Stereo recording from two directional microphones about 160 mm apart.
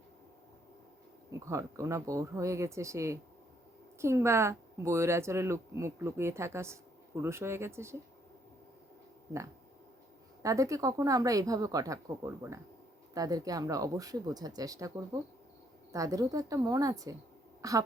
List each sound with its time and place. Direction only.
1.3 s speech: 20° right (ahead or behind)
10.4 s speech: 20° right (ahead or behind)
17.6 s a sound: 20° right (ahead or behind)